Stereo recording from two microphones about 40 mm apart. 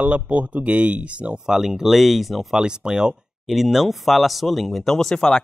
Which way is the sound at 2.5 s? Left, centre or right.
Centre.